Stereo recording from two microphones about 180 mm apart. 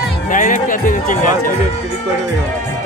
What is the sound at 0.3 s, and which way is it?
Run, 45° left (ahead or behind).